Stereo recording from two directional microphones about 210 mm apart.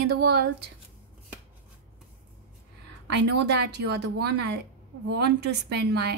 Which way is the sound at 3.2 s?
55° right (ahead or behind).